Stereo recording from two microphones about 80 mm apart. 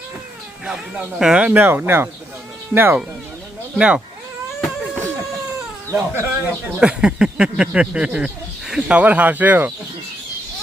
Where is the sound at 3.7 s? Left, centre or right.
Centre.